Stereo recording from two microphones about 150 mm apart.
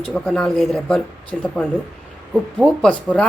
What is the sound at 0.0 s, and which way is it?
A woman's voice, 5° left (ahead or behind).